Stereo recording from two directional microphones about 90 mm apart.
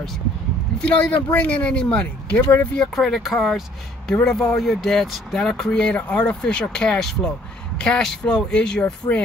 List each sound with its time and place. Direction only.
0.7 s speech: 15° left (ahead or behind)
2.9 s speech: centre (ahead or behind); by 9.2 s 20° left (ahead or behind)